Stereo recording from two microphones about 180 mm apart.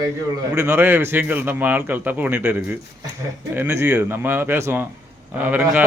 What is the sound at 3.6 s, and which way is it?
A man's voice, 10° right (ahead or behind).